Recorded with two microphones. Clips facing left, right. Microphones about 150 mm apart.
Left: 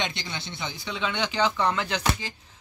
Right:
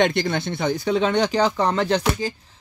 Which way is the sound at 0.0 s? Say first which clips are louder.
Right 13 dB; 55° right (ahead or behind).